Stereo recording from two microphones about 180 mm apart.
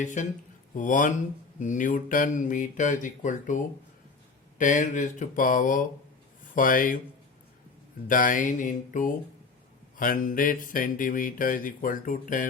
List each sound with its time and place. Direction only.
0.0 s speech: 45° left (ahead or behind)
8.0 s speech: 50° left (ahead or behind)